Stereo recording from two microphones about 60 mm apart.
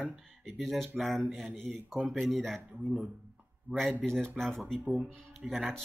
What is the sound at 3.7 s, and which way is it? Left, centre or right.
Speech, right.